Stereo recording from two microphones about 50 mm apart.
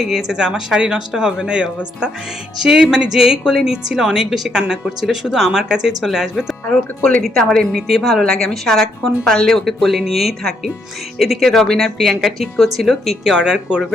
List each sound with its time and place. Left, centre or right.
0.0 s a woman's voice: centre
7.3 s a woman's voice: centre
7.8 s a woman's voice: centre
8.2 s a woman's voice: centre
13.3 s a woman's voice: centre